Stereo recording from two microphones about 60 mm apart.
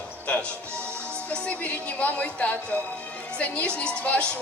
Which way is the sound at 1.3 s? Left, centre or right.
Left.